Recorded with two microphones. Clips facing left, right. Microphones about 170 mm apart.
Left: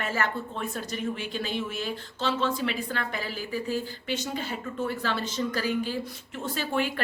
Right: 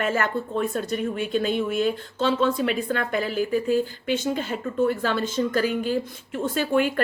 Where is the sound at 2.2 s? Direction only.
50° right (ahead or behind).